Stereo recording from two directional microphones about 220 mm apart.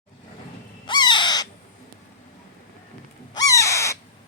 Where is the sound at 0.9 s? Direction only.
20° left (ahead or behind).